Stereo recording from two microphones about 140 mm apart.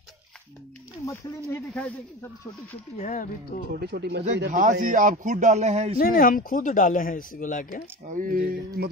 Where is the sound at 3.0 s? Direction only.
65° left (ahead or behind).